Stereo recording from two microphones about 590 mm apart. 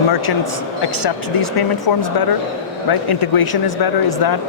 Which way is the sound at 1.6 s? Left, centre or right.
Left.